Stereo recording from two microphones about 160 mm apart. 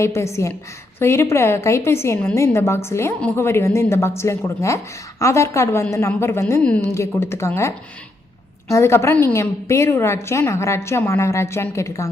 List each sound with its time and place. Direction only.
0.0 s a woman's voice: 15° left (ahead or behind)
8.7 s a woman's voice: 15° left (ahead or behind)